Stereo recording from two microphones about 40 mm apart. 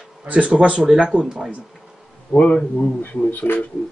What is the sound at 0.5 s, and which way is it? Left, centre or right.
Speech, right.